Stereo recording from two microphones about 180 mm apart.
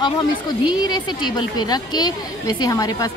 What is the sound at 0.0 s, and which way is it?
A woman's voice, 25° left (ahead or behind).